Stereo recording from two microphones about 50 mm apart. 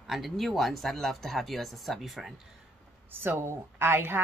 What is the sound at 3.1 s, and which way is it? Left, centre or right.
A woman's voice, right.